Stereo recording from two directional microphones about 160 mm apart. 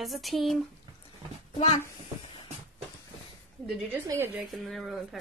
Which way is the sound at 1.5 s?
40° left (ahead or behind).